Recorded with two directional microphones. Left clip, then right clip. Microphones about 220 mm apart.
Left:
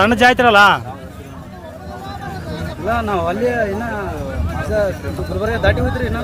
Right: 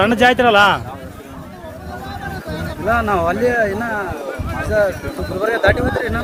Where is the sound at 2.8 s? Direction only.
5° left (ahead or behind).